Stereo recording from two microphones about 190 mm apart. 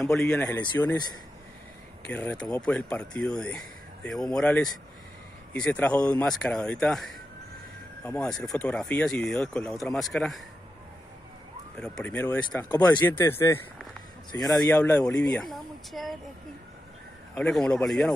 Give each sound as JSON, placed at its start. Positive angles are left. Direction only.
{"t": 0.1, "sound": "speech", "side_deg": 5}
{"t": 2.0, "sound": "speech", "side_deg": 5}
{"t": 11.8, "sound": "speech", "side_deg": 5}
{"t": 15.5, "sound": "speech", "side_deg": 0}
{"t": 17.3, "sound": "speech", "side_deg": 5}